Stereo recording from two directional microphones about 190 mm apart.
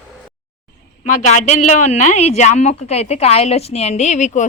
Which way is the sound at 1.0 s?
40° left (ahead or behind).